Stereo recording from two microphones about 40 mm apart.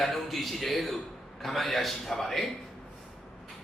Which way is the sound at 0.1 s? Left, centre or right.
Centre.